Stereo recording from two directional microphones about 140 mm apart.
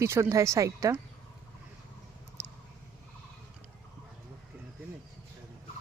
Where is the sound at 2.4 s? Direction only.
20° right (ahead or behind).